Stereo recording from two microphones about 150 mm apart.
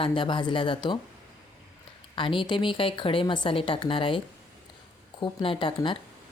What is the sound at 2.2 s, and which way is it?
Speech, 35° left (ahead or behind).